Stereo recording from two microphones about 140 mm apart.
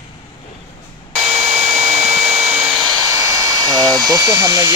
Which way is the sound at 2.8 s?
25° right (ahead or behind).